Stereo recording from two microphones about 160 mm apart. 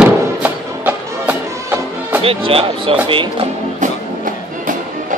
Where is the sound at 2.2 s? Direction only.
35° right (ahead or behind).